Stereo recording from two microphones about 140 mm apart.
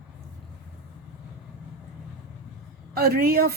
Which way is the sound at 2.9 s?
90° right.